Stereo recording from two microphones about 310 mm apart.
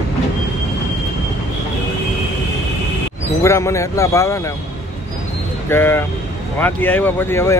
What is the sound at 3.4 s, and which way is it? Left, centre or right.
Speech, centre.